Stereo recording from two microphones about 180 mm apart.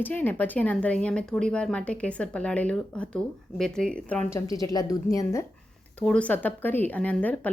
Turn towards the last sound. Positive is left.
turn(degrees=10)  # may be behind; listen again after turning